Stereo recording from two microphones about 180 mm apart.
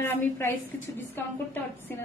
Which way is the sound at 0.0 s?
10° left (ahead or behind).